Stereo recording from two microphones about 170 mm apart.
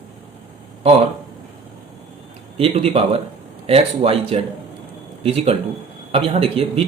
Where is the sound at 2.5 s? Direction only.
35° right (ahead or behind).